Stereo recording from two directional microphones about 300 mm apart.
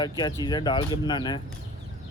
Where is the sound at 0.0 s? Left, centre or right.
Centre.